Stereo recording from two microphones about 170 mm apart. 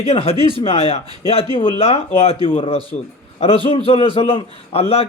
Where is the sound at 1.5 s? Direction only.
30° left (ahead or behind).